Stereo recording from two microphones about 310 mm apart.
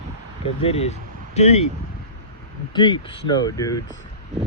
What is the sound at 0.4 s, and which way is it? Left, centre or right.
Speech, centre.